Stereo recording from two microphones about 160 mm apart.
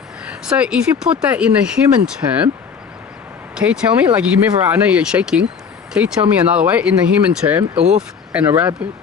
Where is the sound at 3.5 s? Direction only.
5° right (ahead or behind).